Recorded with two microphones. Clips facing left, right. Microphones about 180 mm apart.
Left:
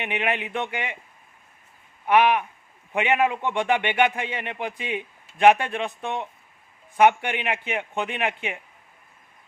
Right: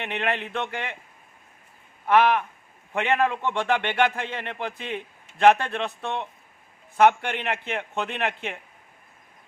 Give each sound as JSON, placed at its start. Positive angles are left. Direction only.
{"t": 0.0, "sound": "a man's voice", "side_deg": 10}
{"t": 2.0, "sound": "a man's voice", "side_deg": 10}